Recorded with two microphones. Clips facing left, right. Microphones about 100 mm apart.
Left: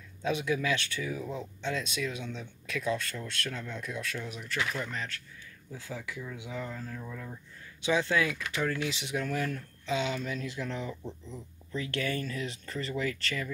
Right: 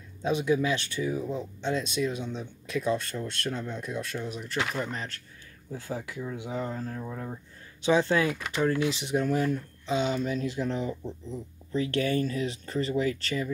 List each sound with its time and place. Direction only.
0.2 s speech: 30° right (ahead or behind)
5.7 s speech: 40° right (ahead or behind); by 13.5 s 25° right (ahead or behind)